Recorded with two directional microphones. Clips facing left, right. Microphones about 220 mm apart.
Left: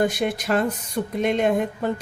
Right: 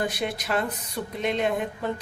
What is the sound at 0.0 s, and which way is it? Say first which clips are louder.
Speech: left 6 dB; 45° left (ahead or behind).